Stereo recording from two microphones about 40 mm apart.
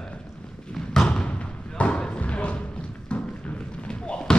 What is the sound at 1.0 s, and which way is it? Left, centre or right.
Thump, left.